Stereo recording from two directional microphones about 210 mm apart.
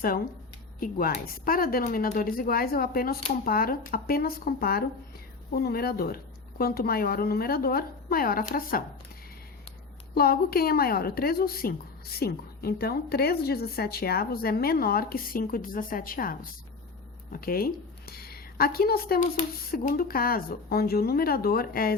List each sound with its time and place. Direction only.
0.8 s a woman's voice: 45° left (ahead or behind)
10.2 s a woman's voice: 45° left (ahead or behind)